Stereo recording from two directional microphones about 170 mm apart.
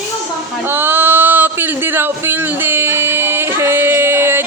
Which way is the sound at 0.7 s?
15° right (ahead or behind).